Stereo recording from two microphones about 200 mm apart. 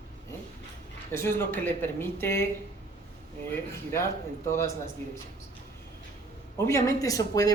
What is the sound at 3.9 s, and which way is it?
Speech, 15° left (ahead or behind).